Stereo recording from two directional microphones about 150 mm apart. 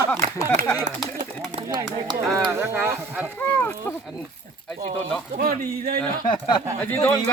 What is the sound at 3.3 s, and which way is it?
Speech, 15° left (ahead or behind).